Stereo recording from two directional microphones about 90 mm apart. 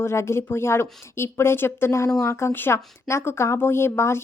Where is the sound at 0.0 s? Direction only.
30° left (ahead or behind).